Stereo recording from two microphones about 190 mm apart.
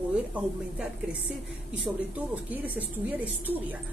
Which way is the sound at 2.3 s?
10° right (ahead or behind).